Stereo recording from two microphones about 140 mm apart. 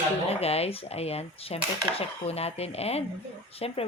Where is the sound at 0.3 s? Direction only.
45° left (ahead or behind).